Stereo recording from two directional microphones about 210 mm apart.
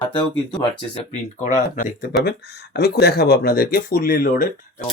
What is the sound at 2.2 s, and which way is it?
Speech, 50° left (ahead or behind).